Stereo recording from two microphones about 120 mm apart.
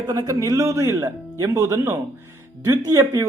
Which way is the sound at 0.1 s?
40° right (ahead or behind).